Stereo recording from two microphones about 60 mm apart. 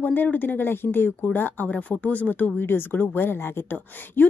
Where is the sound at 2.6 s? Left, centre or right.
Left.